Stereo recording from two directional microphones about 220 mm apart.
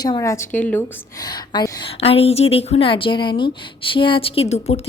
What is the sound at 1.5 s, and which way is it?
A woman's voice, 20° left (ahead or behind).